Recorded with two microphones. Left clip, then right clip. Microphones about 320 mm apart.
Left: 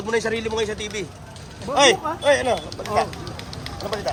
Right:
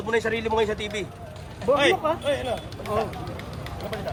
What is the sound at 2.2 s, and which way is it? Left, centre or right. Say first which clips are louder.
Speech: left 8 dB; centre.